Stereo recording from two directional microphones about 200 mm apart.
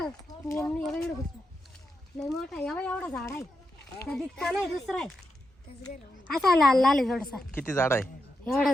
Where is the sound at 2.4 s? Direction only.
Centre (ahead or behind).